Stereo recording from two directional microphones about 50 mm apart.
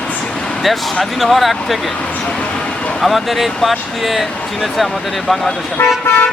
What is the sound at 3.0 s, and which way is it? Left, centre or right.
Speech, centre.